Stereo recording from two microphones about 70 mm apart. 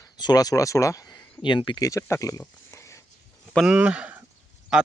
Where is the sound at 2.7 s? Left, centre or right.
Left.